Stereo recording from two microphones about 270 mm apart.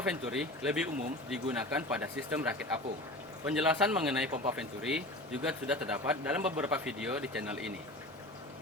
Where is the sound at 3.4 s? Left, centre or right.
Centre.